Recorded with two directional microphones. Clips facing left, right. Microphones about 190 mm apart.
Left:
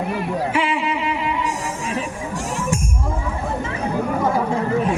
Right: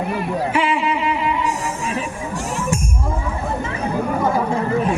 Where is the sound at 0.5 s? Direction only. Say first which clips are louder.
Right 2 dB; 45° right (ahead or behind).